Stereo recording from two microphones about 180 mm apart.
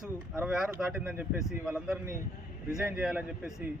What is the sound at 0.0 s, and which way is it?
A man's voice, 5° right (ahead or behind).